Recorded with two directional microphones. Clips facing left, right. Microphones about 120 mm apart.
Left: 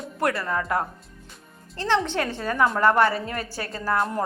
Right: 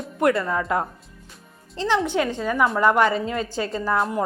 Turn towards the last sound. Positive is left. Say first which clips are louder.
# right 2 dB
turn(degrees=-5)  # may be behind; listen again after turning